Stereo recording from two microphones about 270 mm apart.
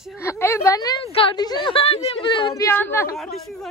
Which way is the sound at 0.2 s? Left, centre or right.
Centre.